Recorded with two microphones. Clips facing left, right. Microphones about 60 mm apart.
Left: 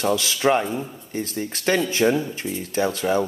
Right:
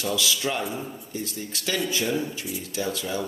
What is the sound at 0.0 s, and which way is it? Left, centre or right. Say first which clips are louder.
Speech: left 6 dB; left.